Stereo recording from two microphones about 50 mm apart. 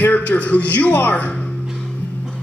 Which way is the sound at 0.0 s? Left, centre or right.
Left.